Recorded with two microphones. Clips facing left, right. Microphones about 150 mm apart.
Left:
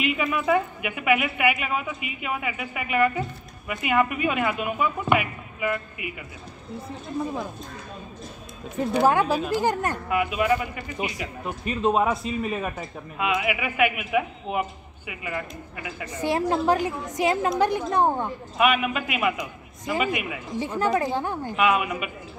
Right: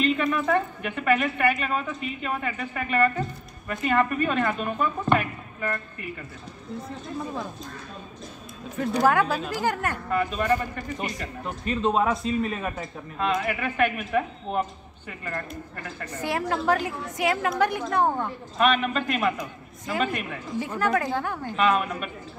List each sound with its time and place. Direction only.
0.0 s speech: 10° left (ahead or behind)
9.0 s a woman's voice: 15° left (ahead or behind)
10.0 s speech: 10° left (ahead or behind)
16.2 s a woman's voice: 25° left (ahead or behind)
20.6 s a woman's voice: 20° left (ahead or behind)
21.5 s speech: 10° left (ahead or behind)